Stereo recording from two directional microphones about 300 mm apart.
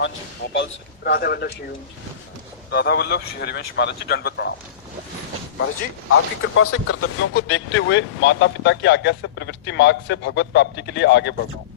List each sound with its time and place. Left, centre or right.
0.5 s a man's voice: left
2.6 s a man's voice: left
6.1 s a man's voice: left